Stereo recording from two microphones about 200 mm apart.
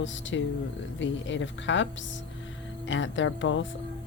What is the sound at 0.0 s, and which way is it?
Speech, 70° left (ahead or behind).